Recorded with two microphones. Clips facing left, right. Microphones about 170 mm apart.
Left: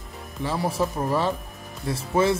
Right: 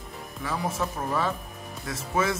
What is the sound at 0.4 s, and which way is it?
Speech, 30° left (ahead or behind).